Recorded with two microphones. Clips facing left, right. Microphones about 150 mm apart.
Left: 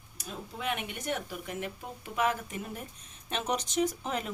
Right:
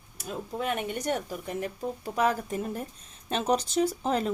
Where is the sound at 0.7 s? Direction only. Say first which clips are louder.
Right 4 dB; 40° right (ahead or behind).